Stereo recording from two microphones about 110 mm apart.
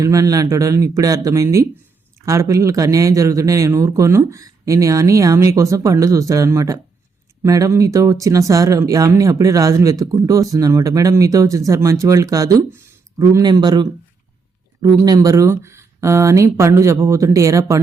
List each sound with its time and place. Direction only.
0.0 s speech: 30° right (ahead or behind)